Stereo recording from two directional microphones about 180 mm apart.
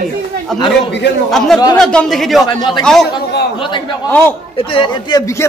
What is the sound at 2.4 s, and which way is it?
Speech, 25° left (ahead or behind).